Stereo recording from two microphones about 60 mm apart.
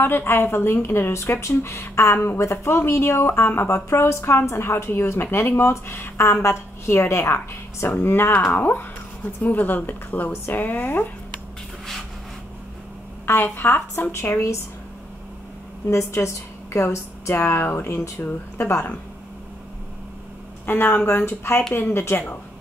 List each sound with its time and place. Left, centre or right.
0.0 s speech: left
1.1 s speech: left
13.2 s speech: left
15.9 s a woman's voice: left
20.6 s speech: left